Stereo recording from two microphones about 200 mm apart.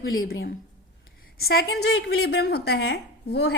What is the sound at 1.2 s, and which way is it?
A woman's voice, 50° left (ahead or behind).